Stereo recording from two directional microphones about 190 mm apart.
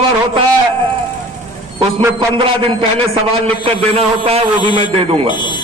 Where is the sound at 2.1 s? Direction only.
30° right (ahead or behind).